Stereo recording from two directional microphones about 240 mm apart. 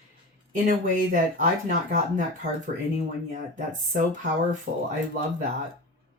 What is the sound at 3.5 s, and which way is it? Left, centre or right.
Speech, right.